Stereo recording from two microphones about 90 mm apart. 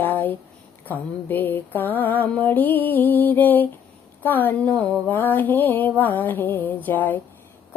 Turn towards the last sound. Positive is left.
turn(degrees=20)  # may be behind; listen again after turning